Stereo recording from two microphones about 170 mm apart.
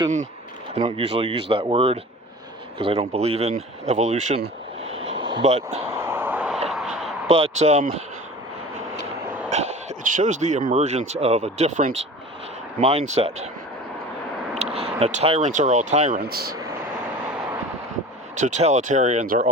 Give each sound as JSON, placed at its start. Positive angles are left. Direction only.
{"t": 0.7, "sound": "speech", "side_deg": -35}
{"t": 5.1, "sound": "speech", "side_deg": -30}
{"t": 6.0, "sound": "vehicle", "side_deg": -15}
{"t": 6.7, "sound": "a sound", "side_deg": 0}
{"t": 7.3, "sound": "speech", "side_deg": -35}
{"t": 9.5, "sound": "speech", "side_deg": -45}
{"t": 14.6, "sound": "speech", "side_deg": -35}
{"t": 16.3, "sound": "speech", "side_deg": -65}
{"t": 18.3, "sound": "speech", "side_deg": -45}